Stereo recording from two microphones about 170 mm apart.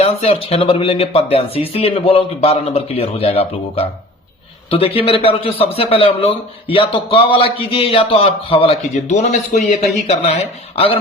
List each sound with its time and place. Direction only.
0.0 s a man's voice: 35° left (ahead or behind)